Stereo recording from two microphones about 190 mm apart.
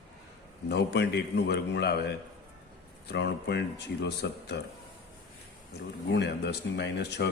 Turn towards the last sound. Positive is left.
turn(degrees=60)  # may be behind; listen again after turning